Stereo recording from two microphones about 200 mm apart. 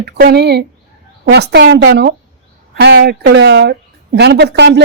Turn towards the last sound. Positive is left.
turn(degrees=-60)  # may be behind; listen again after turning